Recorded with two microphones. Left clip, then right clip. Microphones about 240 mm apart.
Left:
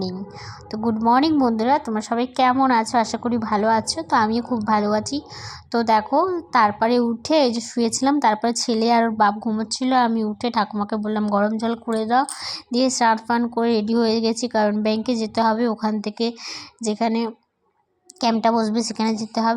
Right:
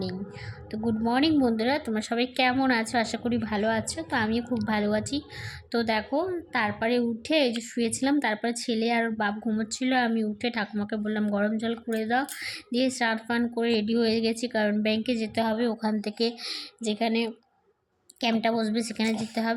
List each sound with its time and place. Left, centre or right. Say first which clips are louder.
0.7 s a woman's voice: left 9 dB; centre